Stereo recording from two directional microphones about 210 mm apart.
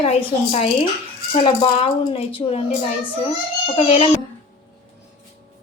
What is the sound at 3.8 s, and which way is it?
Speech, 30° left (ahead or behind).